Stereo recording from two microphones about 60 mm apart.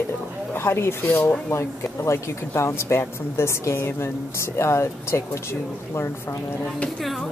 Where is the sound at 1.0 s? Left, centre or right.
Left.